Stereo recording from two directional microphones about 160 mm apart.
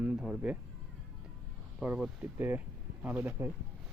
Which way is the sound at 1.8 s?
10° right (ahead or behind).